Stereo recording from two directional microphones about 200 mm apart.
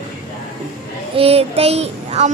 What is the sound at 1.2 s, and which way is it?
Child singing, 30° right (ahead or behind).